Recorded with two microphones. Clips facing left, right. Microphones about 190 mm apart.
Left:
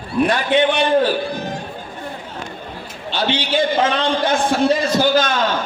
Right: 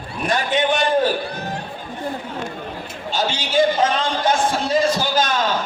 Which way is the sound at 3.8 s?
55° left (ahead or behind).